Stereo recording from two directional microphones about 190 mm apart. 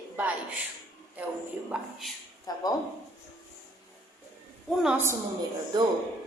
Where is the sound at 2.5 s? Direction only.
20° left (ahead or behind).